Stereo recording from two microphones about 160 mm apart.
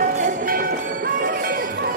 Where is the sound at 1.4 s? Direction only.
65° right (ahead or behind).